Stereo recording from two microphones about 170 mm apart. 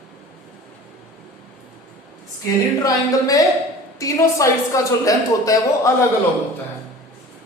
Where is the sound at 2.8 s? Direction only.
20° left (ahead or behind).